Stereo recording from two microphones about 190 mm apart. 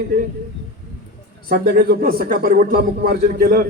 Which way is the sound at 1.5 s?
55° right (ahead or behind).